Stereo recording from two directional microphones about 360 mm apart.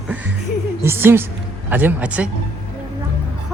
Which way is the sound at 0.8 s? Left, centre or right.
Centre.